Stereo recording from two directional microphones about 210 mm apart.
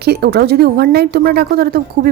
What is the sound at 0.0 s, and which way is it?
A woman's voice, 50° right (ahead or behind).